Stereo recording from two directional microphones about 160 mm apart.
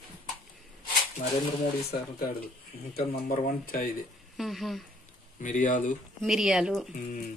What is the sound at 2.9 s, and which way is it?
Speech, 65° left (ahead or behind).